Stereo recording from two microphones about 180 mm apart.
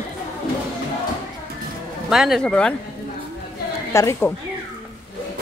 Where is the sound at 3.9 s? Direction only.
15° left (ahead or behind).